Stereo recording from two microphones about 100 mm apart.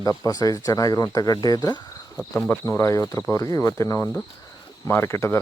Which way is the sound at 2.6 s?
30° left (ahead or behind).